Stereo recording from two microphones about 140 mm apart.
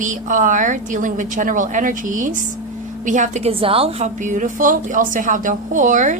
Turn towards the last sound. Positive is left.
turn(degrees=-65)  # may be behind; listen again after turning